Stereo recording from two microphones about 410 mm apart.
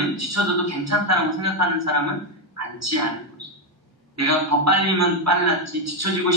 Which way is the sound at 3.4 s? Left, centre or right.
Right.